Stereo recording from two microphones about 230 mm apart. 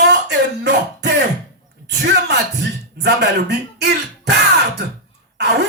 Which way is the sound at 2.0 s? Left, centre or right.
Right.